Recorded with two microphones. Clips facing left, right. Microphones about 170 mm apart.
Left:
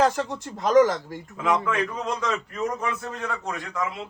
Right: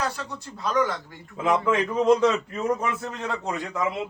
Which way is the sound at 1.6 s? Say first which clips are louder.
Right 6 dB; 25° right (ahead or behind).